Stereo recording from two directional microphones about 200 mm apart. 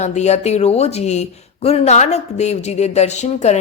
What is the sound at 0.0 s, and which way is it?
Speech, 35° left (ahead or behind).